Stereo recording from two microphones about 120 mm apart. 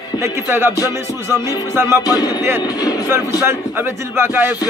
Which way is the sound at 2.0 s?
30° left (ahead or behind).